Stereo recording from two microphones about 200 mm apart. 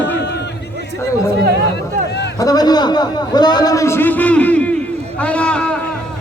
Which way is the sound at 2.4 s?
20° left (ahead or behind).